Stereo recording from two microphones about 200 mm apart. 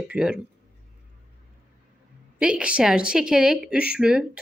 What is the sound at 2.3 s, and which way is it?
A woman's voice, 5° right (ahead or behind).